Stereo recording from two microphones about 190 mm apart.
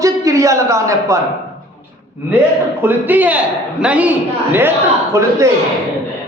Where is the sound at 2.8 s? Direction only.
10° right (ahead or behind).